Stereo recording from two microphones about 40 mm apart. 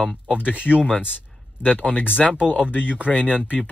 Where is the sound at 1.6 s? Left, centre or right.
Left.